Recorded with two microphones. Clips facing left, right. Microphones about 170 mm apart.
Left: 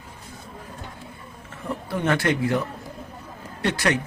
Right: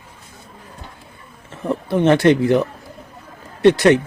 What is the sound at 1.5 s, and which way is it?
Speech, 25° right (ahead or behind).